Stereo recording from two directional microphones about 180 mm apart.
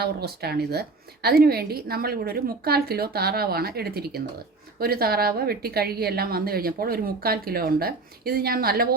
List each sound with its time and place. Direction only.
0.0 s a woman's voice: 60° right (ahead or behind)